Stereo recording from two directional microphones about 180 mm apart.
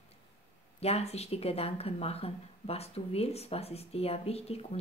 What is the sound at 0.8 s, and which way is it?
Speech, 35° left (ahead or behind).